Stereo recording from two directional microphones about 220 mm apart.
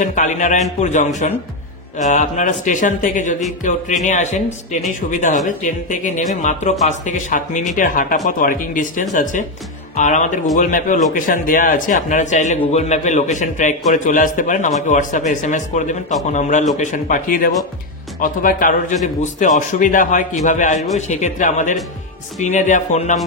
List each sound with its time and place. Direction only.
0.0 s a man's voice: 35° left (ahead or behind)
5.9 s a man's voice: 35° left (ahead or behind)